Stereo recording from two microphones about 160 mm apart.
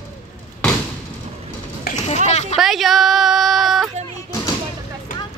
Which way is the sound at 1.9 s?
75° left (ahead or behind).